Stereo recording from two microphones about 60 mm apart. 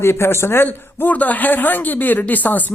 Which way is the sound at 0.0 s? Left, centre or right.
Left.